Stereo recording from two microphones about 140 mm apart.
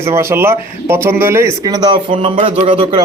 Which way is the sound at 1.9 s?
35° right (ahead or behind).